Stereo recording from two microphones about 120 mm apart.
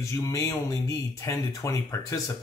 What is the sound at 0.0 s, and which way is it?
Speech, 25° left (ahead or behind).